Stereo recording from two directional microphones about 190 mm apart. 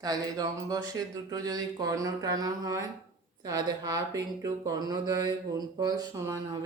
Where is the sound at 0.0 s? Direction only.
20° right (ahead or behind).